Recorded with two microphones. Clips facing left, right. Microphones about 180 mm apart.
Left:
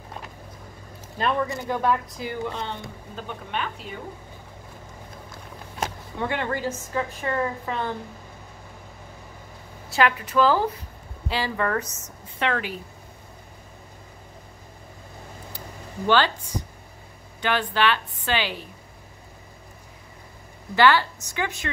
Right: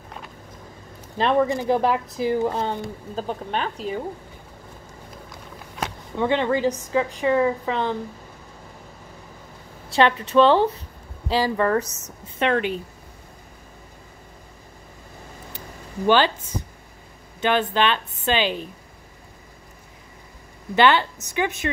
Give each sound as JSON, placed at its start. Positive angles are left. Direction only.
{"t": 1.1, "sound": "a woman's voice", "side_deg": -30}
{"t": 2.1, "sound": "speech", "side_deg": -35}
{"t": 6.1, "sound": "a woman's voice", "side_deg": -20}
{"t": 9.8, "sound": "a woman's voice", "side_deg": -30}
{"t": 17.4, "sound": "a woman's voice", "side_deg": -20}
{"t": 20.7, "sound": "a woman's voice", "side_deg": -20}